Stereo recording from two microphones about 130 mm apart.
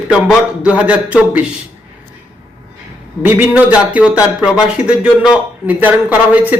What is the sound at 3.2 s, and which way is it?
Speech, 10° right (ahead or behind).